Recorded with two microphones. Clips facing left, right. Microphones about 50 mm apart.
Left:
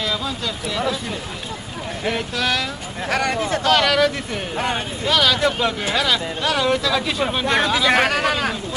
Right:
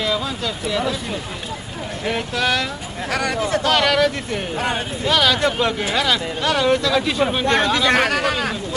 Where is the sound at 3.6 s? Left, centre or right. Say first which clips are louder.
Left 1 dB; centre.